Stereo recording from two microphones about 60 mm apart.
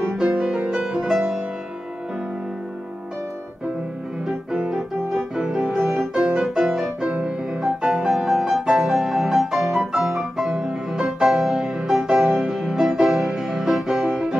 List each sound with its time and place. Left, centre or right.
0.0 s music: centre
4.3 s piano: centre
5.3 s music: centre